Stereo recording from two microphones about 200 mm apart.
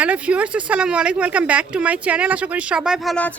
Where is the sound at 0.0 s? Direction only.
5° right (ahead or behind).